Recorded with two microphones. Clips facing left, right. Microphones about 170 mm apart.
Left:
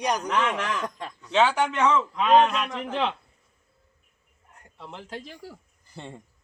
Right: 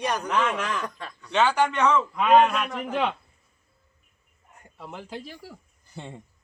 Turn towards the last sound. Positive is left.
turn(degrees=0)  # may be behind; listen again after turning